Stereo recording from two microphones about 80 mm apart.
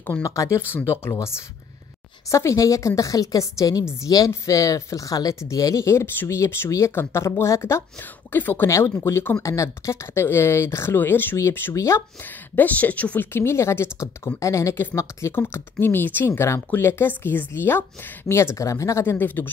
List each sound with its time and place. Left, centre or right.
0.2 s speech: left
0.7 s speech: left
2.3 s speech: left
8.3 s speech: left
8.6 s speech: left
9.4 s speech: left
12.5 s speech: left
19.1 s speech: left